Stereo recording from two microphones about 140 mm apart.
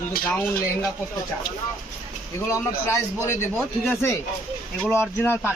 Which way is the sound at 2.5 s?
20° left (ahead or behind).